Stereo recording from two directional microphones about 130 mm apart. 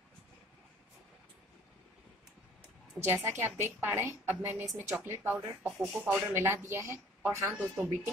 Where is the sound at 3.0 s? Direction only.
20° right (ahead or behind).